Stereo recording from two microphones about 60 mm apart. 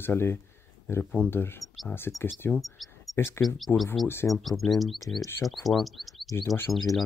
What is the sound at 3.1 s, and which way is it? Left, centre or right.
Speech, left.